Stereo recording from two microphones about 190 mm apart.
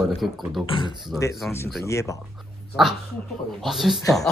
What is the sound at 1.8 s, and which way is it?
Speech, 15° left (ahead or behind).